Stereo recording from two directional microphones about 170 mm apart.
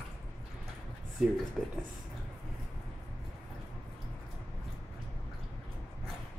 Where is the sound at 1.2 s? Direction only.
5° right (ahead or behind).